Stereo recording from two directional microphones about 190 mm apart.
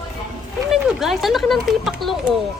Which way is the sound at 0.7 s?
Centre (ahead or behind).